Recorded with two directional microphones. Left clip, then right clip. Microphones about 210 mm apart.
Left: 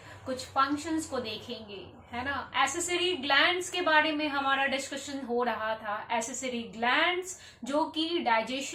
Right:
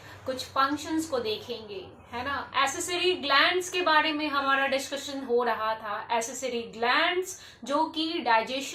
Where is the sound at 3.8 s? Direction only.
5° left (ahead or behind).